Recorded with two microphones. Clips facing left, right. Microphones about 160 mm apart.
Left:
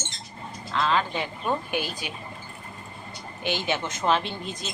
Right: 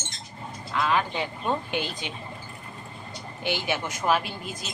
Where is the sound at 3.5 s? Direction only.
15° right (ahead or behind).